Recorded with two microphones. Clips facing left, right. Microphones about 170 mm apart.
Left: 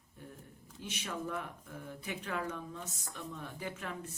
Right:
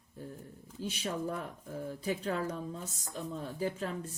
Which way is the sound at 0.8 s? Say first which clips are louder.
Right 5 dB; 30° right (ahead or behind).